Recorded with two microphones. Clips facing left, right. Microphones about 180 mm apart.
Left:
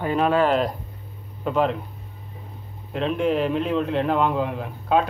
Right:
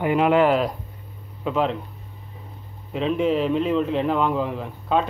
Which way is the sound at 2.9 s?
Centre (ahead or behind).